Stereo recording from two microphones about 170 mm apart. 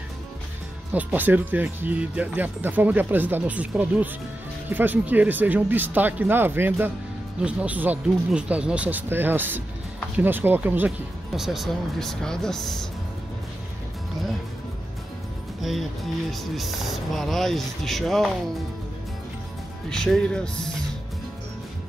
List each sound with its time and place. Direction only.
0.9 s speech: 10° right (ahead or behind)
15.6 s speech: centre (ahead or behind)
19.9 s speech: 5° left (ahead or behind)